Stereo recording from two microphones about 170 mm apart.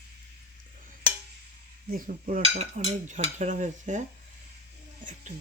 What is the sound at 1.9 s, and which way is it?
Speech, 55° right (ahead or behind).